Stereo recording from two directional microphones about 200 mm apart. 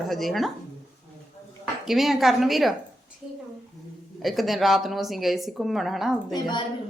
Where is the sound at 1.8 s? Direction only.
Centre (ahead or behind).